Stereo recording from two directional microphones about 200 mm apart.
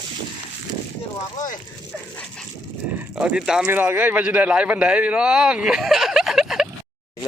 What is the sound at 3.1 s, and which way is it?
Speech, 5° right (ahead or behind).